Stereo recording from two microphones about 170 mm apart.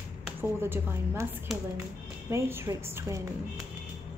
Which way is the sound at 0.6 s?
15° right (ahead or behind).